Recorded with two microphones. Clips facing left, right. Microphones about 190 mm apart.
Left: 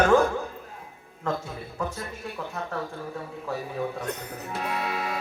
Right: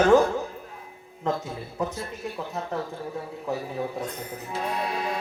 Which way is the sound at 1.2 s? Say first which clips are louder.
Right 2 dB; 20° right (ahead or behind).